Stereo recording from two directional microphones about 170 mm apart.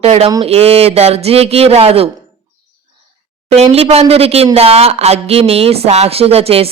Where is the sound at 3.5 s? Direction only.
40° right (ahead or behind).